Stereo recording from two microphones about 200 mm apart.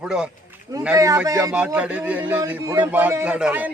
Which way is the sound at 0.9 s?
15° right (ahead or behind).